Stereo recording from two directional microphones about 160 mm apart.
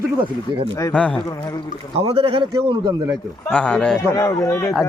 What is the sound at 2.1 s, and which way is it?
Speech, 35° right (ahead or behind).